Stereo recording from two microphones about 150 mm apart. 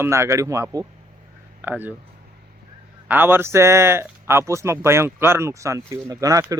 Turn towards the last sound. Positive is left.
turn(degrees=-25)  # may be behind; listen again after turning